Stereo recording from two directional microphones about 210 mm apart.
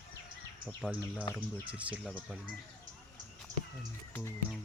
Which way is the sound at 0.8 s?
5° right (ahead or behind).